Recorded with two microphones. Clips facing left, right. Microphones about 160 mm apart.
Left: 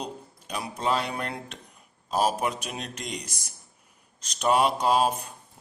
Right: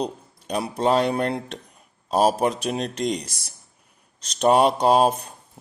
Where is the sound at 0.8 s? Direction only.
35° right (ahead or behind).